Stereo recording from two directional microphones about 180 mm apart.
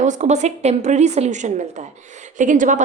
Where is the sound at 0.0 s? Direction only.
40° right (ahead or behind).